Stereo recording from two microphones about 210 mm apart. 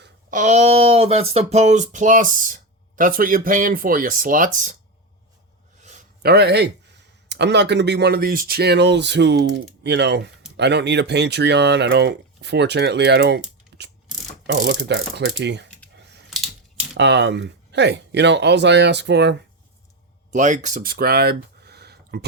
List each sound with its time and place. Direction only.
0.3 s a sound: 35° right (ahead or behind)
5.8 s a sound: 35° right (ahead or behind)
6.2 s speech: 50° right (ahead or behind)
16.3 s typewriter: centre (ahead or behind)
17.0 s speech: 55° right (ahead or behind)
20.3 s speech: 35° right (ahead or behind)